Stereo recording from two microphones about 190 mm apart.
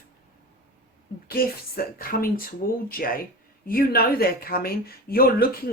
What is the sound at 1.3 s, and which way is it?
A woman's voice, 50° left (ahead or behind).